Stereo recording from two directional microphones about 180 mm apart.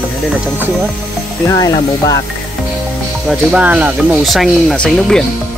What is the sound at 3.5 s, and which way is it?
Speech, 5° right (ahead or behind).